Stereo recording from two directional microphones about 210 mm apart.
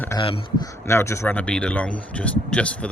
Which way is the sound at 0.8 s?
15° left (ahead or behind).